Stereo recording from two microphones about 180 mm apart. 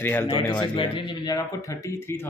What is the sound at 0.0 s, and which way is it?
Speech, 10° left (ahead or behind).